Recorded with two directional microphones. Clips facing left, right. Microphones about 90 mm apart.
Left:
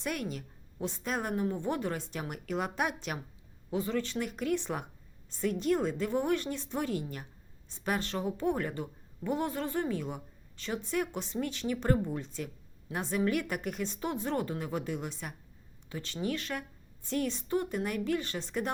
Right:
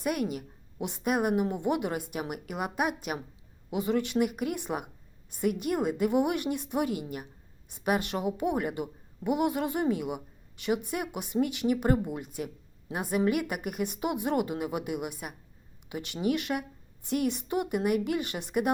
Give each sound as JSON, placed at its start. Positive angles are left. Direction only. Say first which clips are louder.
{"t": 0.0, "sound": "a woman's voice", "louder": "right 5 dB", "side_deg": -10}
{"t": 3.7, "sound": "a woman's voice", "louder": "right 4 dB", "side_deg": -20}